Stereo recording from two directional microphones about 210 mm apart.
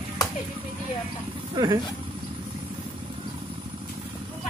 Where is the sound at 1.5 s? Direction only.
20° right (ahead or behind).